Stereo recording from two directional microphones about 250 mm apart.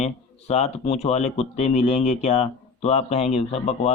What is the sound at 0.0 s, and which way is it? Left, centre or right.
Speech, left.